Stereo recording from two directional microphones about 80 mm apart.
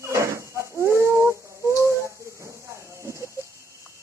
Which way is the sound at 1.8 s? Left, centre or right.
Right.